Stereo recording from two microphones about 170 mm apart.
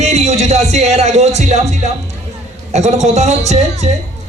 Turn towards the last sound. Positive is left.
turn(degrees=-40)  # may be behind; listen again after turning